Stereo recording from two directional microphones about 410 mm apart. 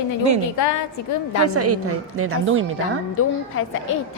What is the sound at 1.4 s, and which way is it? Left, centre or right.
A woman's voice, right.